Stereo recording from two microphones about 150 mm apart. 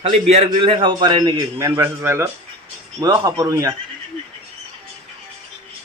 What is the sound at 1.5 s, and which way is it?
Speech, 20° right (ahead or behind).